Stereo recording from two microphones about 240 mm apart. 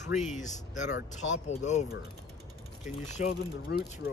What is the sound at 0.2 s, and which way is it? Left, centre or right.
Speech, left.